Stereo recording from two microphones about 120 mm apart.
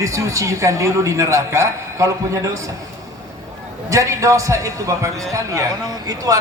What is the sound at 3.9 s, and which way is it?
A man's voice, 25° right (ahead or behind).